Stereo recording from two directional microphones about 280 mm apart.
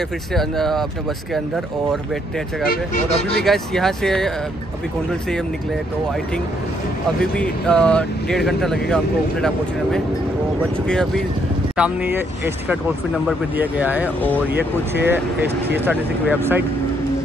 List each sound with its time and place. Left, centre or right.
0.3 s speech: centre
2.6 s speech: left
3.4 s speech: centre
7.2 s speech: centre
10.9 s speech: centre
14.5 s speech: right
15.0 s speech: centre